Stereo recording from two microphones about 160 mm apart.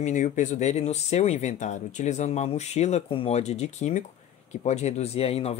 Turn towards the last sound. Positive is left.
turn(degrees=40)  # may be behind; listen again after turning